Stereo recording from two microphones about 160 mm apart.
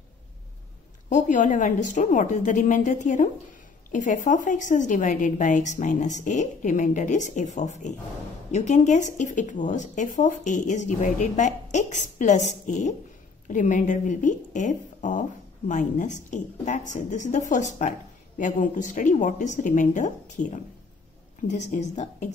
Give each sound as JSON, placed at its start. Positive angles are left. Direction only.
{"t": 1.0, "sound": "a woman's voice", "side_deg": 50}